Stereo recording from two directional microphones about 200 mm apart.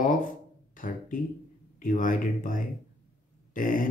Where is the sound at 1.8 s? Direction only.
40° left (ahead or behind).